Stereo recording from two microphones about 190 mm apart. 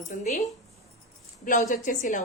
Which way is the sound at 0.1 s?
40° left (ahead or behind).